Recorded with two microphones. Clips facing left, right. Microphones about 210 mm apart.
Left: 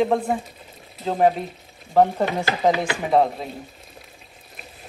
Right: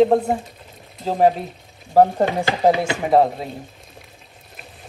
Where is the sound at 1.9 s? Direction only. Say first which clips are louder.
Right 3 dB; 35° right (ahead or behind).